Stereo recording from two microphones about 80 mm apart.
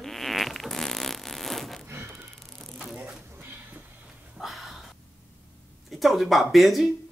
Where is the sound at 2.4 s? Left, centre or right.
Centre.